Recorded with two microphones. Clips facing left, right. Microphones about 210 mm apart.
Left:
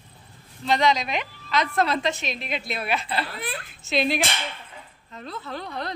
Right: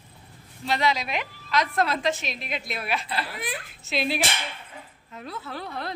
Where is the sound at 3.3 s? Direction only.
15° right (ahead or behind).